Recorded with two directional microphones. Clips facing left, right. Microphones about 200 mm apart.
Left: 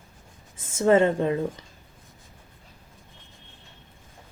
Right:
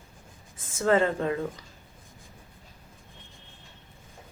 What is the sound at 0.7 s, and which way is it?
Speech, 25° left (ahead or behind).